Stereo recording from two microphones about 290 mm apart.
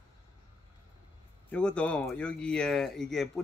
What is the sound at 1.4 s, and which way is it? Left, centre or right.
Speech, centre.